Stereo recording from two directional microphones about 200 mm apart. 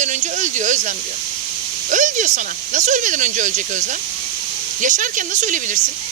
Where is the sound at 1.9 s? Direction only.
40° right (ahead or behind).